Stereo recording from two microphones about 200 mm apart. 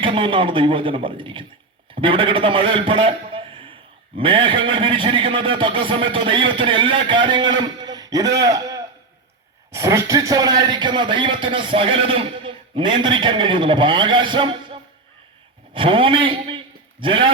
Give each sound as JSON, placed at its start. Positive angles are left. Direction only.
{"t": 0.0, "sound": "a man's voice", "side_deg": -25}